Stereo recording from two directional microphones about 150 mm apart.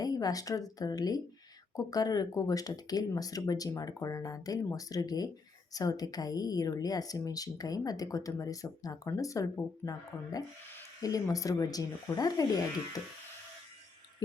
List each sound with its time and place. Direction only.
0.0 s speech: 25° left (ahead or behind)